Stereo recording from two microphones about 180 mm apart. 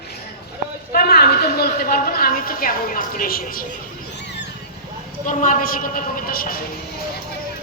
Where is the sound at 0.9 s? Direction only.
60° left (ahead or behind).